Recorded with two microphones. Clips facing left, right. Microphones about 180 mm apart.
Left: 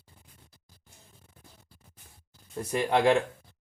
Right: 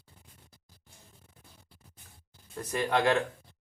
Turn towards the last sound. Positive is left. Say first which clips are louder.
# left 3 dB
turn(degrees=15)  # may be behind; listen again after turning